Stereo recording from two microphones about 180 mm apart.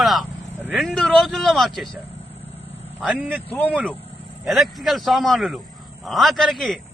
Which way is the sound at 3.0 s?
5° right (ahead or behind).